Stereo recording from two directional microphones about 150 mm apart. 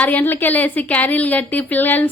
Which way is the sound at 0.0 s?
10° left (ahead or behind).